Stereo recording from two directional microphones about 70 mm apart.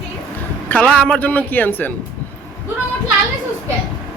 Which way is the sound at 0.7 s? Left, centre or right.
Left.